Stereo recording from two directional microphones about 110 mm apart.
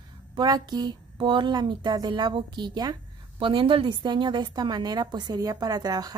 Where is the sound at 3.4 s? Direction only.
50° right (ahead or behind).